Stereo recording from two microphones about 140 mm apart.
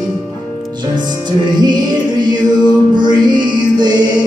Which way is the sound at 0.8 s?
30° right (ahead or behind).